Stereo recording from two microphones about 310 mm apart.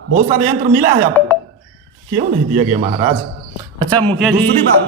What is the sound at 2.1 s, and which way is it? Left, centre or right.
Speech, right.